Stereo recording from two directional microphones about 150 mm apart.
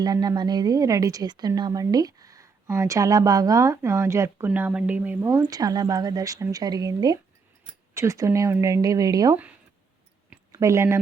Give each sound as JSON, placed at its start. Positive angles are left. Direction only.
{"t": 0.0, "sound": "a woman's voice", "side_deg": -25}
{"t": 5.5, "sound": "a woman's voice", "side_deg": -25}
{"t": 10.5, "sound": "a woman's voice", "side_deg": -20}